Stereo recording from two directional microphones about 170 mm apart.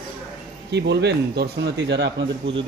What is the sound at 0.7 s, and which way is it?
A man's voice, 85° right.